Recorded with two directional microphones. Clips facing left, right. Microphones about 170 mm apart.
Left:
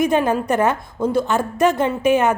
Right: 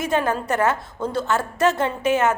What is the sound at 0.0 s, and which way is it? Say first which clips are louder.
A woman's voice: left 5 dB; 15° left (ahead or behind).